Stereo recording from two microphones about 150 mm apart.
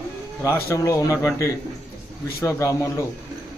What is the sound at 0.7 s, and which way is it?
Speech, 20° left (ahead or behind).